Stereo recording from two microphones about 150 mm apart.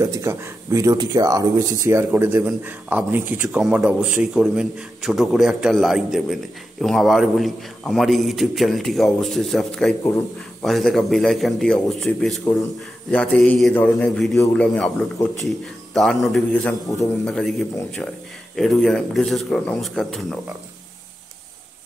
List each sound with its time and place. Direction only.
0.0 s a man's voice: 20° right (ahead or behind); by 20.3 s 5° left (ahead or behind)